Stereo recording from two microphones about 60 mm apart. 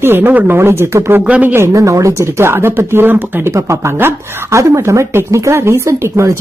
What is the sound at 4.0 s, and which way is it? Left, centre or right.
Speech, right.